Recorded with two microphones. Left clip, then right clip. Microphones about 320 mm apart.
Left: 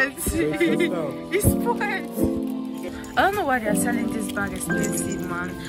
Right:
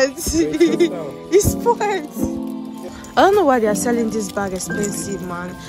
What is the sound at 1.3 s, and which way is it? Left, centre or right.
Music, centre.